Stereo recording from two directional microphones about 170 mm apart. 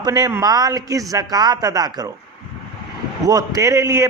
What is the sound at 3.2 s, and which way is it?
Speech, 20° right (ahead or behind).